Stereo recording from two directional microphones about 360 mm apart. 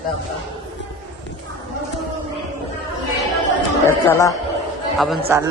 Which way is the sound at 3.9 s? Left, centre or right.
Centre.